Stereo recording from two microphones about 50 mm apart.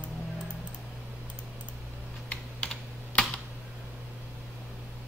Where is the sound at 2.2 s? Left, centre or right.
Left.